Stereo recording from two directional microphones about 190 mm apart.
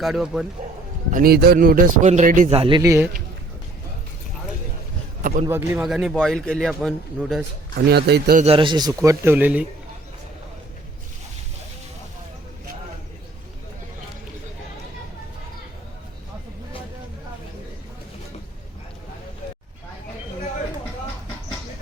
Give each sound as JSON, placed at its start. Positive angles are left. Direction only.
{"t": 0.0, "sound": "a man's voice", "side_deg": 0}
{"t": 1.1, "sound": "a man's voice", "side_deg": -55}
{"t": 5.2, "sound": "a man's voice", "side_deg": -45}
{"t": 5.5, "sound": "a man's voice", "side_deg": -10}
{"t": 7.8, "sound": "speech", "side_deg": -60}
{"t": 8.4, "sound": "a man's voice", "side_deg": -30}
{"t": 9.0, "sound": "speech", "side_deg": -10}